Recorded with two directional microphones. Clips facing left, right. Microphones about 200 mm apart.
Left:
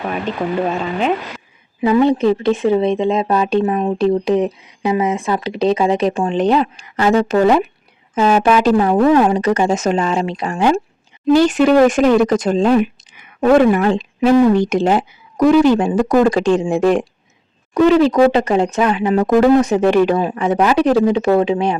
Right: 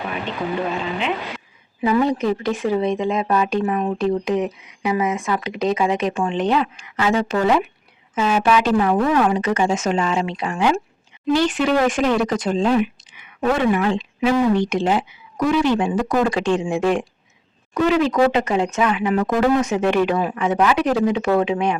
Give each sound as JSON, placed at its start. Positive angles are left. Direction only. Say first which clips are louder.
{"t": 1.8, "sound": "speech", "louder": "left 5 dB", "side_deg": 25}